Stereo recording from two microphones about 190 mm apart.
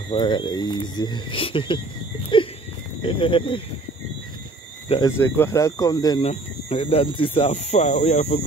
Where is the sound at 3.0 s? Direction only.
25° left (ahead or behind).